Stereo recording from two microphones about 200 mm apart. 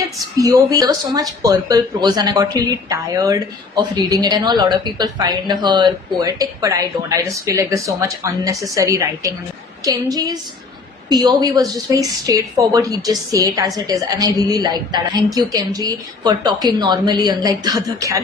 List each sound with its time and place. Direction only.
0.3 s a woman's voice: 20° right (ahead or behind)